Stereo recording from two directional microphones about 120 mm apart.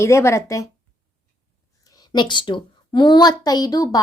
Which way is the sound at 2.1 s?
40° left (ahead or behind).